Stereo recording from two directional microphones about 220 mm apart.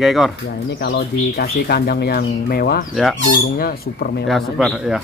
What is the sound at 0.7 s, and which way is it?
Speech, 45° left (ahead or behind).